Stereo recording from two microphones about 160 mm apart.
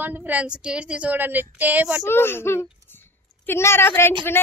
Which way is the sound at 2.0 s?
15° left (ahead or behind).